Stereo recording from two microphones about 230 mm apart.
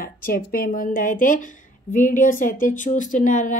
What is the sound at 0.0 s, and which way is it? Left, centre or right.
A woman's voice, left.